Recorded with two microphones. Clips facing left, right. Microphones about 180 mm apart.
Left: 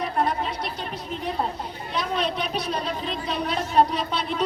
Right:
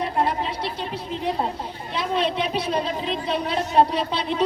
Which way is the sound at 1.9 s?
25° right (ahead or behind).